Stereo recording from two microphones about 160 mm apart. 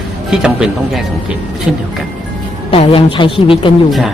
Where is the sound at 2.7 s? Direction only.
35° left (ahead or behind).